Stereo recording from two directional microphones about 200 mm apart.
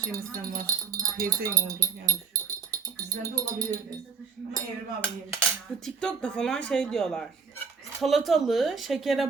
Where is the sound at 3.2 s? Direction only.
15° right (ahead or behind).